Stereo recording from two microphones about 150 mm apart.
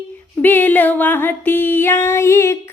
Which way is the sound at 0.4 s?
10° left (ahead or behind).